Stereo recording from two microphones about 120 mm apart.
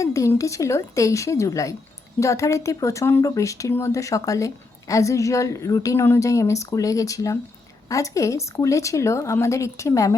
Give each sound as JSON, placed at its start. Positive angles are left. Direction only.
{"t": 0.0, "sound": "speech", "side_deg": 25}